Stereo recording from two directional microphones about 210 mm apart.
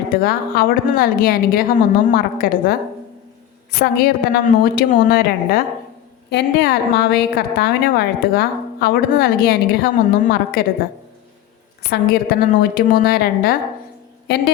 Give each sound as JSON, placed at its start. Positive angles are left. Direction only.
{"t": 0.2, "sound": "a woman's voice", "side_deg": 45}
{"t": 3.8, "sound": "a woman's voice", "side_deg": 45}
{"t": 11.9, "sound": "a woman's voice", "side_deg": 45}